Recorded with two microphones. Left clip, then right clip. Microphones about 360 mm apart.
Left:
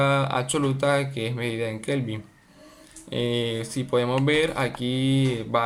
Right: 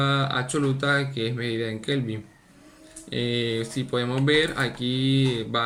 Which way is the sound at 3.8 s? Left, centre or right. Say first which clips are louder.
Left 3 dB; centre.